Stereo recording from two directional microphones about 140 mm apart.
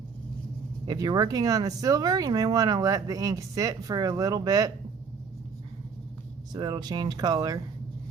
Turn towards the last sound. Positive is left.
turn(degrees=-25)  # may be behind; listen again after turning